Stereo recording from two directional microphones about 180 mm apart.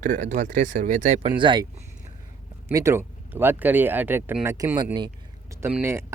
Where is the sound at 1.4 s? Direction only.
25° right (ahead or behind).